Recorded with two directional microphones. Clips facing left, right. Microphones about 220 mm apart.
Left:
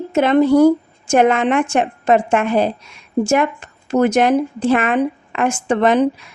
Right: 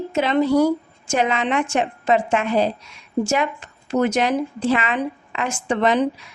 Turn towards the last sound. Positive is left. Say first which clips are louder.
# left 4 dB
turn(degrees=50)  # may be behind; listen again after turning